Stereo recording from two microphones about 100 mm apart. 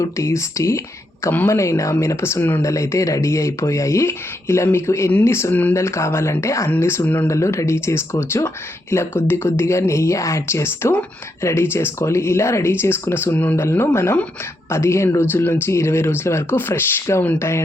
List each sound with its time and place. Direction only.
0.0 s speech: 30° left (ahead or behind)
1.2 s speech: 20° left (ahead or behind)
1.5 s speech: 30° left (ahead or behind)